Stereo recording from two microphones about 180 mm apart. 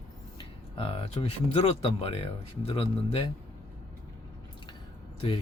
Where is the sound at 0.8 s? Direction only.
30° left (ahead or behind).